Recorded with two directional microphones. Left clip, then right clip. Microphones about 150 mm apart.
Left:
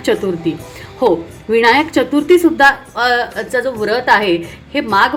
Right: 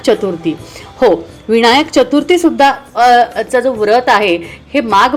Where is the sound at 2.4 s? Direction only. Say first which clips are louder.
Even; 30° right (ahead or behind).